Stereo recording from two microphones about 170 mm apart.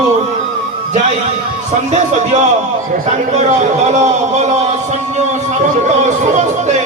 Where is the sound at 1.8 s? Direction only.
45° right (ahead or behind).